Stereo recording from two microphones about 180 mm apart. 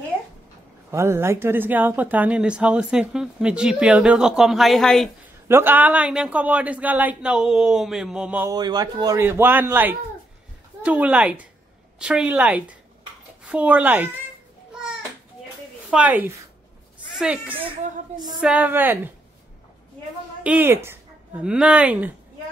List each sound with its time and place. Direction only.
0.9 s speech: 15° right (ahead or behind)
5.5 s speech: 10° right (ahead or behind)
8.5 s speech: 25° right (ahead or behind)
15.9 s speech: 10° right (ahead or behind)
17.8 s a woman's voice: 45° right (ahead or behind)
18.4 s speech: 5° right (ahead or behind)
20.4 s speech: 10° right (ahead or behind)